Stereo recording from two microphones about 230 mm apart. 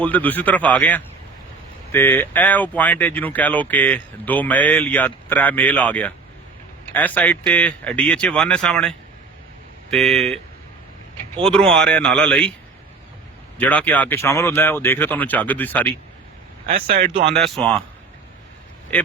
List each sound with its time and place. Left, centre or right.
0.0 s speech: centre
11.4 s speech: centre
13.6 s speech: centre
17.0 s speech: right
17.3 s speech: centre
18.9 s speech: centre